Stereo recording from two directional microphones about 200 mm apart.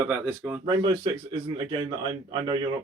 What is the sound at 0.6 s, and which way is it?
Speech, 20° right (ahead or behind).